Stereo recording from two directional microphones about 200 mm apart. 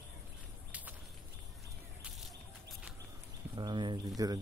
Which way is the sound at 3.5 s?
25° right (ahead or behind).